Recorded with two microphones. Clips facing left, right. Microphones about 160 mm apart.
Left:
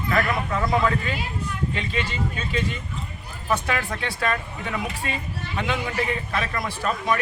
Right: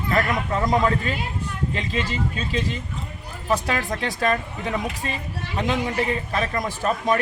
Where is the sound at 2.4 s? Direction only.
35° right (ahead or behind).